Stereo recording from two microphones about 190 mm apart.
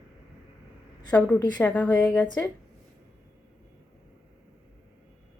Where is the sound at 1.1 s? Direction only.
5° left (ahead or behind).